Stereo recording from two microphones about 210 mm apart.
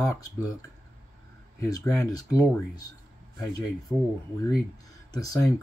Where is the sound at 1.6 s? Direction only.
15° left (ahead or behind).